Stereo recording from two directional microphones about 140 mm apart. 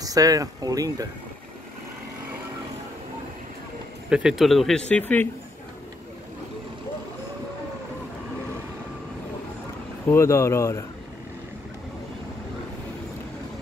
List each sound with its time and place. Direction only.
0.0 s speech: 25° right (ahead or behind)
4.1 s speech: 5° right (ahead or behind); by 5.3 s 10° left (ahead or behind)
10.0 s speech: 20° left (ahead or behind)